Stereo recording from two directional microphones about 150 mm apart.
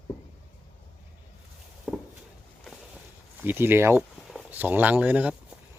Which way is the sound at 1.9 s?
5° right (ahead or behind).